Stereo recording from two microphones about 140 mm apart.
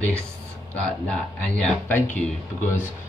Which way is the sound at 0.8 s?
5° left (ahead or behind).